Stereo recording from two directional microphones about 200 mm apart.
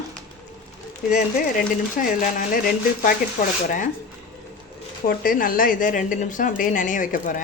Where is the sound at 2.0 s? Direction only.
40° left (ahead or behind).